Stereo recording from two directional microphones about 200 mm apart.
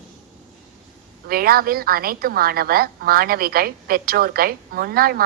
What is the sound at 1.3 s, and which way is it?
A woman's voice, 50° right (ahead or behind).